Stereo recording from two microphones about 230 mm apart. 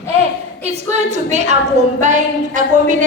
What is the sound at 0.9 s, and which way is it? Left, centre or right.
Speech, right.